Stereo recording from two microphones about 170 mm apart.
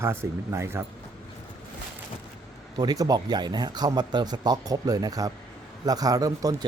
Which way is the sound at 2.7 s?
20° right (ahead or behind).